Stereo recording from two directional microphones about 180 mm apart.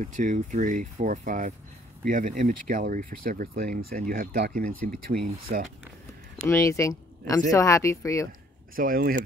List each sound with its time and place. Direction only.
0.0 s speech: 45° right (ahead or behind)
6.4 s speech: 15° left (ahead or behind)
8.7 s speech: 50° right (ahead or behind)